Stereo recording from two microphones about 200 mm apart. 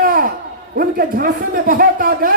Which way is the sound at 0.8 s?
45° right (ahead or behind).